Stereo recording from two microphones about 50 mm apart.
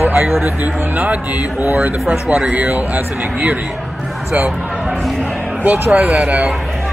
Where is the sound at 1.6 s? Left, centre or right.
Right.